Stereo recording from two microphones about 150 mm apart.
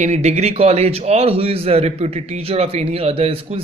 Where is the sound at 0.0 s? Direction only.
45° right (ahead or behind).